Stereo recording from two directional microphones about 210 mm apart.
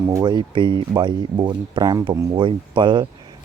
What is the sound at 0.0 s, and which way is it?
Speech, 15° right (ahead or behind).